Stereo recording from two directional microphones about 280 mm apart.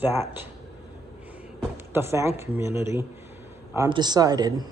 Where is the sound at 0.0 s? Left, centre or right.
Centre.